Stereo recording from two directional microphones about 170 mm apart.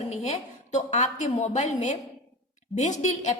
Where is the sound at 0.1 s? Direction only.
40° left (ahead or behind).